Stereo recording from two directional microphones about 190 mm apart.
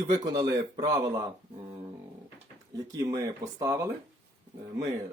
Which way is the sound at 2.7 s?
20° right (ahead or behind).